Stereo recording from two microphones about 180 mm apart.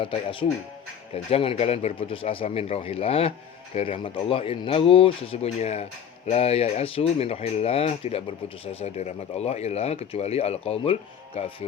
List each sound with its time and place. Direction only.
0.0 s speech: 30° left (ahead or behind)